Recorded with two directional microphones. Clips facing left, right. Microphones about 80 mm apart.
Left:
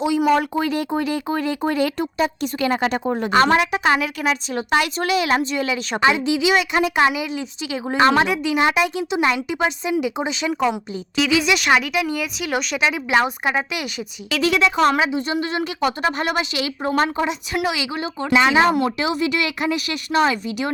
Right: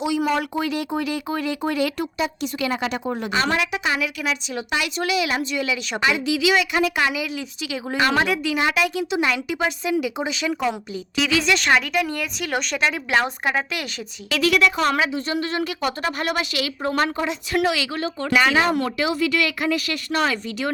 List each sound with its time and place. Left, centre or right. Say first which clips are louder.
0.3 s a woman's voice: left 4 dB; left
11.3 s speech: left 2 dB; centre